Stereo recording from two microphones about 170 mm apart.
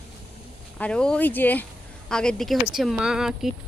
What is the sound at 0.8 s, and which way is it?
Speech, 5° left (ahead or behind).